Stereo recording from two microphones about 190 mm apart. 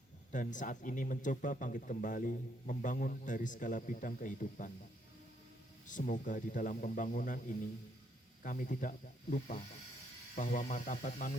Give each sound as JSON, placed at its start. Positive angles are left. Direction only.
{"t": 0.3, "sound": "speech", "side_deg": 40}
{"t": 5.9, "sound": "speech", "side_deg": 45}